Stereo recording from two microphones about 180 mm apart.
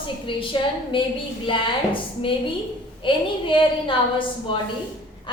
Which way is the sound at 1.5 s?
30° left (ahead or behind).